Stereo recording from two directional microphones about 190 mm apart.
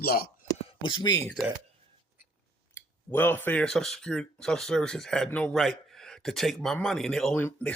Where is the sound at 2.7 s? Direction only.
10° left (ahead or behind).